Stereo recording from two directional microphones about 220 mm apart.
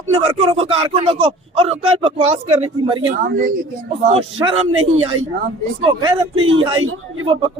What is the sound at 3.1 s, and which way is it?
Speech, 40° right (ahead or behind).